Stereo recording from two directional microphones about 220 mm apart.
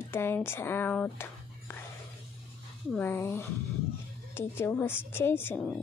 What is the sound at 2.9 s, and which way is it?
Speech, 10° left (ahead or behind).